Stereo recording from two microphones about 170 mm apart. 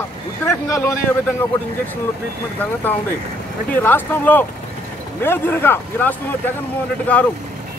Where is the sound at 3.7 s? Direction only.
10° left (ahead or behind).